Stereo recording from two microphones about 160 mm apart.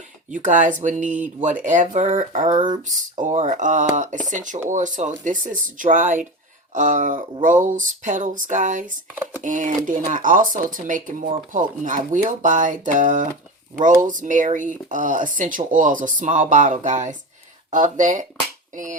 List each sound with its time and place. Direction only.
0.3 s speech: 50° right (ahead or behind)
2.5 s speech: 30° right (ahead or behind)
2.8 s speech: 50° right (ahead or behind)
18.7 s a sound: 50° right (ahead or behind)